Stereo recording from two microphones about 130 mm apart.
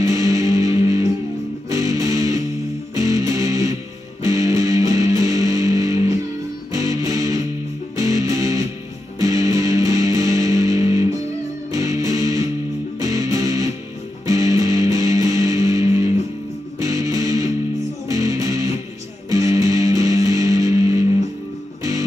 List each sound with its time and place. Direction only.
0.0 s music: 25° right (ahead or behind)